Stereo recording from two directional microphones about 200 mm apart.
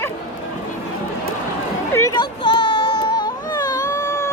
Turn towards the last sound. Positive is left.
turn(degrees=15)  # may be behind; listen again after turning